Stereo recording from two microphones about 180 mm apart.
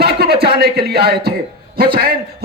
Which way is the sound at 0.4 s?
60° right (ahead or behind).